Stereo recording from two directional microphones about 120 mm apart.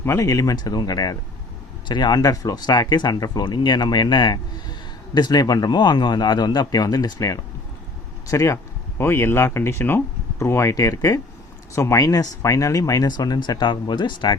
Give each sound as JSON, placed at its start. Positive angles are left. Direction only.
{"t": 0.0, "sound": "speech", "side_deg": 25}